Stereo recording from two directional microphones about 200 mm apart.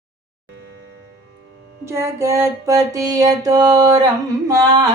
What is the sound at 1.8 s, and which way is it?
Mantra, 15° right (ahead or behind).